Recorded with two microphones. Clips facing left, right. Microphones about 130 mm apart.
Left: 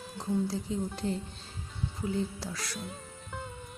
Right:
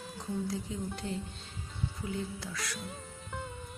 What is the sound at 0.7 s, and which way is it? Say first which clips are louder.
Speech: left 5 dB; 35° left (ahead or behind).